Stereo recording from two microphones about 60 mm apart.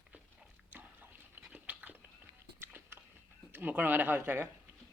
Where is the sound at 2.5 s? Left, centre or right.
Right.